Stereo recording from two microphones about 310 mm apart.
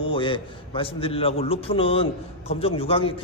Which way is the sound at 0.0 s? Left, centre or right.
Centre.